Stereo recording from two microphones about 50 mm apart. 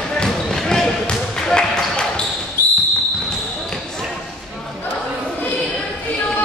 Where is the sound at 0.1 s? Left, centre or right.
Centre.